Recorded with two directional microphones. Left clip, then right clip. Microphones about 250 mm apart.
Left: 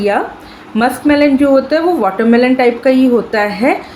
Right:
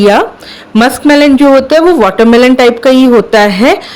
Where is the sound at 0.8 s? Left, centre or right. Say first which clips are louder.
Right 5 dB; right.